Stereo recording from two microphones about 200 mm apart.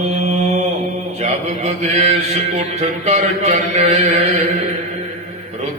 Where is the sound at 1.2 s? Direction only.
35° right (ahead or behind).